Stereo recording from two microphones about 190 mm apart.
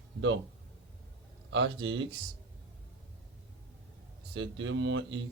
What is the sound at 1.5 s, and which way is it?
Speech, 75° right (ahead or behind).